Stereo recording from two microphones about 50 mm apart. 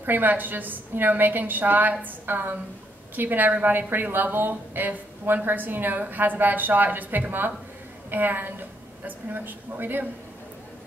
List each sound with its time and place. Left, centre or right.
0.0 s a woman's voice: right